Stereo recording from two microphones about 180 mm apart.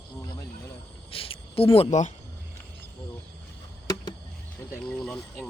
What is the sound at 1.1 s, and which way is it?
Speech, 30° left (ahead or behind).